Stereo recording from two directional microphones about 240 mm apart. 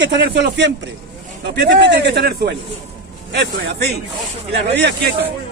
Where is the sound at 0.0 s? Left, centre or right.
Right.